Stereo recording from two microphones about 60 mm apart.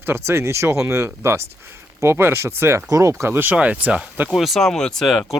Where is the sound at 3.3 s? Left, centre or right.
Right.